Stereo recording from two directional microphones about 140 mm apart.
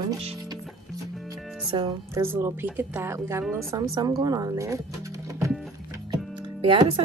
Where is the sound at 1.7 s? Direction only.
35° right (ahead or behind).